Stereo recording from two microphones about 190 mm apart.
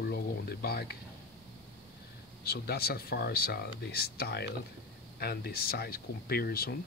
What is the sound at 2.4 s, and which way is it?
Speech, 55° left (ahead or behind).